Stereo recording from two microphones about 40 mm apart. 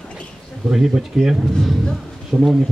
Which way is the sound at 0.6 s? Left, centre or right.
Centre.